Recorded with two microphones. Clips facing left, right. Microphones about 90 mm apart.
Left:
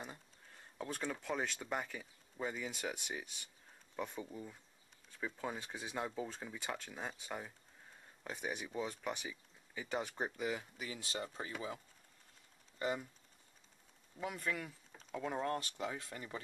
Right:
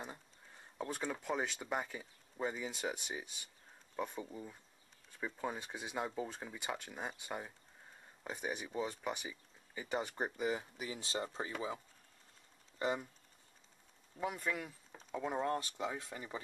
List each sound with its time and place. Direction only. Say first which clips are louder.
0.0 s speech: right 2 dB; 10° right (ahead or behind)
10.4 s speech: right 3 dB; 20° right (ahead or behind)
12.7 s speech: right 2 dB; 25° right (ahead or behind)
14.2 s speech: right 2 dB; 20° right (ahead or behind)